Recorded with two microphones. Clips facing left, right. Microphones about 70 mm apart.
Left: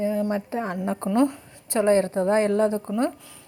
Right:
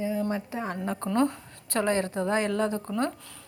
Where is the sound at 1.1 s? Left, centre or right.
Centre.